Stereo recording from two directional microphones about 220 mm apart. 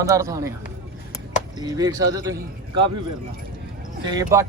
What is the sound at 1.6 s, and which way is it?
Speech, 15° right (ahead or behind).